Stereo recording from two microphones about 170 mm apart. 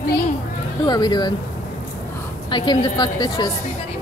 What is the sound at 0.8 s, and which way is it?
Speech, 25° left (ahead or behind).